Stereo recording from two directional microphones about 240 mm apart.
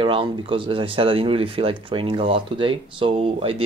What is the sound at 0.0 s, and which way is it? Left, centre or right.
Speech, right.